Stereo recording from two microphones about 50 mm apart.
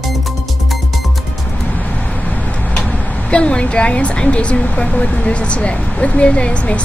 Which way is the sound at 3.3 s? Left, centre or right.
Left.